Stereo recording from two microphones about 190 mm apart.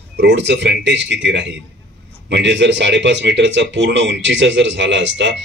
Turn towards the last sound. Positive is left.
turn(degrees=-70)  # may be behind; listen again after turning